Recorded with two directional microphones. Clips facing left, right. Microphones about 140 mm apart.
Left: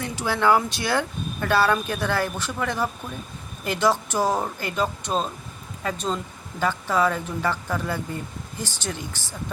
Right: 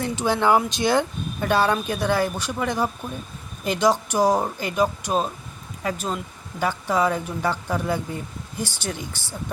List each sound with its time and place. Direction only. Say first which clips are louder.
0.2 s speech: right 1 dB; 20° right (ahead or behind)